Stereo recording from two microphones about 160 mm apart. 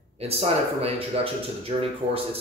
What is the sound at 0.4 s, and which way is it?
Speech, 40° right (ahead or behind).